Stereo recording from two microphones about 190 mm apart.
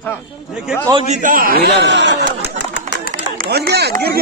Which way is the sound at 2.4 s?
65° left (ahead or behind).